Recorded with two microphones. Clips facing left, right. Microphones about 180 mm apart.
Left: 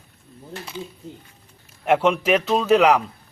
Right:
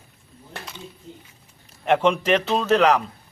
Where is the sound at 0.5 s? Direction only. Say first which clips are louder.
Left 2 dB; 65° right (ahead or behind).